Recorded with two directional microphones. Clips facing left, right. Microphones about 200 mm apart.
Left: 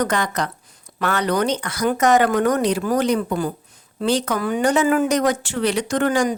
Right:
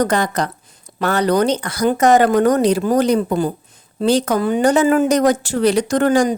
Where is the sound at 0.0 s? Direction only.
35° right (ahead or behind).